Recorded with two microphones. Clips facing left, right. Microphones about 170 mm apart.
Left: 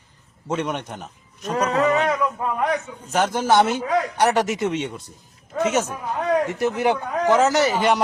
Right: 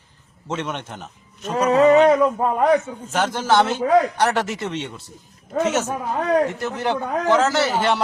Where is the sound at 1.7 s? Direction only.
30° right (ahead or behind).